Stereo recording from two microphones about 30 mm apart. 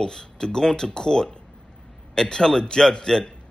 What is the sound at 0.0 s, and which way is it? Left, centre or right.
A man's voice, left.